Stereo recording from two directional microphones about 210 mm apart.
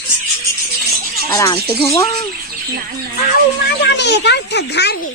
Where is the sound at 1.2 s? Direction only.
15° left (ahead or behind).